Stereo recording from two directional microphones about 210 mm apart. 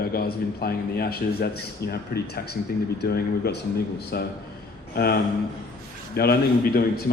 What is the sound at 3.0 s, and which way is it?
A man's voice, 50° left (ahead or behind).